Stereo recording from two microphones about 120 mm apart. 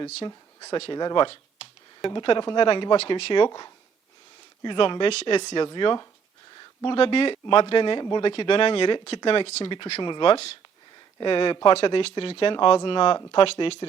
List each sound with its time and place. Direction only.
0.3 s speech: 30° left (ahead or behind); by 13.7 s 50° left (ahead or behind)